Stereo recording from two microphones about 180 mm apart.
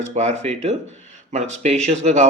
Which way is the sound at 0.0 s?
40° right (ahead or behind).